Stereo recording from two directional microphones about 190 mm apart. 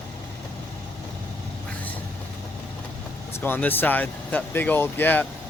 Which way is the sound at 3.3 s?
10° left (ahead or behind).